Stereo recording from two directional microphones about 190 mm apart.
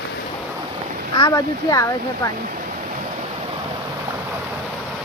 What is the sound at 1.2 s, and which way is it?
Speech, 20° left (ahead or behind).